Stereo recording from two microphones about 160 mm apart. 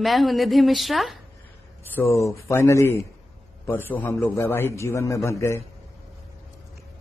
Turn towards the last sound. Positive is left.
turn(degrees=15)  # may be behind; listen again after turning